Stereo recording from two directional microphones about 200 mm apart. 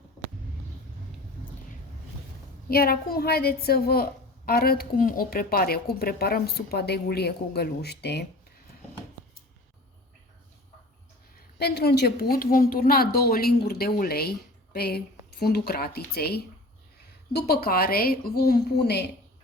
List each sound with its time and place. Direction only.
2.6 s a woman's voice: 50° left (ahead or behind)
11.5 s a woman's voice: 55° left (ahead or behind)